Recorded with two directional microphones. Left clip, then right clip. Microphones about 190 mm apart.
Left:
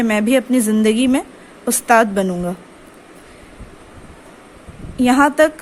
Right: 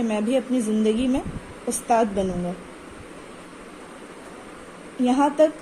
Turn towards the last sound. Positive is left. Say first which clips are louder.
# left 6 dB
turn(degrees=55)  # may be behind; listen again after turning